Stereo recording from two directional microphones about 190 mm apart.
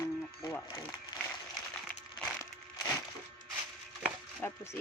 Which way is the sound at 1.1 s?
20° left (ahead or behind).